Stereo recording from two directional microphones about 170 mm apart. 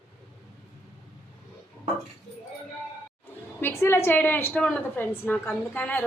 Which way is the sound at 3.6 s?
15° left (ahead or behind).